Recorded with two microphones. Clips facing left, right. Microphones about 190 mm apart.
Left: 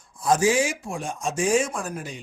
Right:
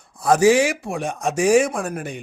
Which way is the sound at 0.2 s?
65° right (ahead or behind).